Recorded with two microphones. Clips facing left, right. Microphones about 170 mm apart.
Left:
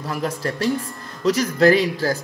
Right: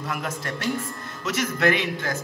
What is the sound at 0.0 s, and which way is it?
Speech, 35° left (ahead or behind).